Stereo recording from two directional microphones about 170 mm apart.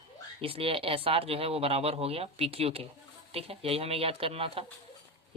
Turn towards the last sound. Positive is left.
turn(degrees=-35)  # may be behind; listen again after turning